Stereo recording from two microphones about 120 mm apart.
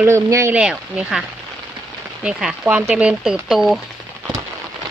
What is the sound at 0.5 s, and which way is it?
Speech, 10° right (ahead or behind).